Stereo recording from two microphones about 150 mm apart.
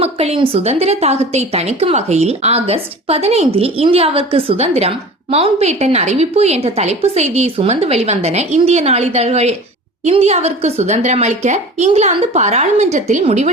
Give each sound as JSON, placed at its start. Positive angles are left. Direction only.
{"t": 0.0, "sound": "a woman's voice", "side_deg": -45}